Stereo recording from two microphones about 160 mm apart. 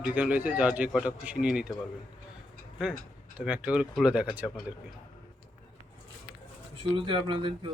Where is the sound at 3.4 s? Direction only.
10° right (ahead or behind).